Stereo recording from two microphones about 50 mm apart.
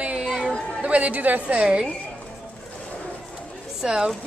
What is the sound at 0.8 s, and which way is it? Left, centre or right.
A woman's voice, right.